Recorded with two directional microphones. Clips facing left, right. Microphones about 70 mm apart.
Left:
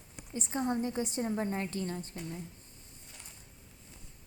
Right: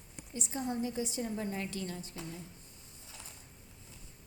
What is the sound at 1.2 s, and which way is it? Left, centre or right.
Speech, left.